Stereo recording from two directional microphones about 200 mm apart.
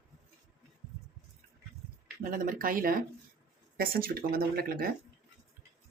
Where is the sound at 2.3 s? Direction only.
45° right (ahead or behind).